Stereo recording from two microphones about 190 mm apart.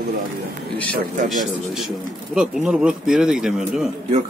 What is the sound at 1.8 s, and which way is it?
Speech, centre (ahead or behind).